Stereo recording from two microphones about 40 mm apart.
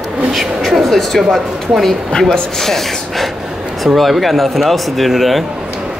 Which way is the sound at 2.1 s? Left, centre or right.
Centre.